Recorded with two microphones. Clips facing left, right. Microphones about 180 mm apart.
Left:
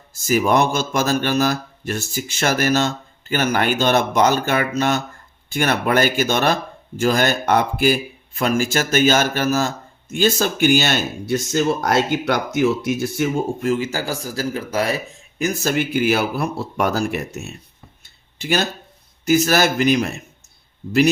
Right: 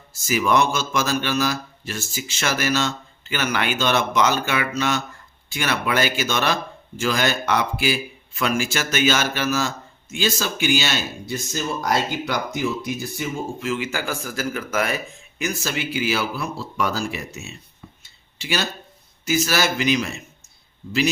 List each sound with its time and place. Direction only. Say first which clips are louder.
0.3 s speech: left 3 dB; 45° left (ahead or behind)
11.3 s speech: left 8 dB; 65° left (ahead or behind); by 15.0 s 35° left (ahead or behind)
15.4 s speech: left 6 dB; 50° left (ahead or behind)